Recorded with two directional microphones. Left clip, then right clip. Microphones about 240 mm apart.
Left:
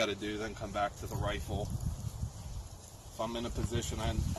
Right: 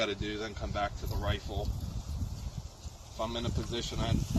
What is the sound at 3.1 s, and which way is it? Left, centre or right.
Speech, centre.